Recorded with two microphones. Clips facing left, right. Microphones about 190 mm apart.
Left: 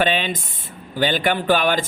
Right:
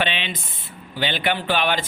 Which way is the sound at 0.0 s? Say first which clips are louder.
Left 5 dB; 45° left (ahead or behind).